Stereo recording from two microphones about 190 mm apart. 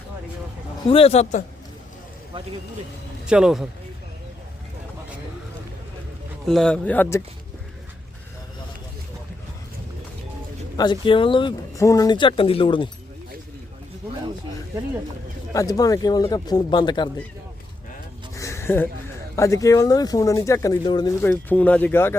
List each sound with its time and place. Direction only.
0.9 s a man's voice: 30° left (ahead or behind)
3.2 s speech: 5° right (ahead or behind)
6.4 s speech: centre (ahead or behind)
10.8 s speech: 25° left (ahead or behind)
15.5 s speech: 20° left (ahead or behind)
18.3 s a sound: 15° left (ahead or behind)
19.4 s speech: 15° left (ahead or behind)
21.2 s speech: 10° left (ahead or behind)